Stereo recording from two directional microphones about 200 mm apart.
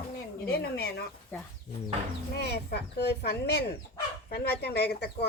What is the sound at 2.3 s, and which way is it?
Speech, 55° left (ahead or behind).